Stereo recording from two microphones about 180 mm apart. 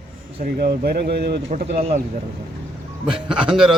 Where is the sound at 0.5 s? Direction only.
60° right (ahead or behind).